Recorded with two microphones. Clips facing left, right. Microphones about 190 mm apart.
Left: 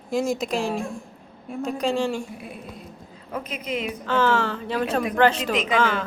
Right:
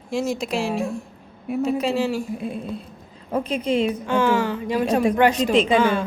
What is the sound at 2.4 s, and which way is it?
A woman's voice, 25° right (ahead or behind).